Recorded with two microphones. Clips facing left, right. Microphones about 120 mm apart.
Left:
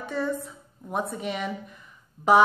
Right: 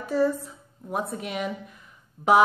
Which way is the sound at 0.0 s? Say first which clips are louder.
Right 5 dB; 5° right (ahead or behind).